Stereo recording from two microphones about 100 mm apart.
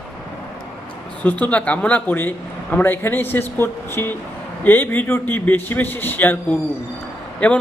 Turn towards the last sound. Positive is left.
turn(degrees=15)  # may be behind; listen again after turning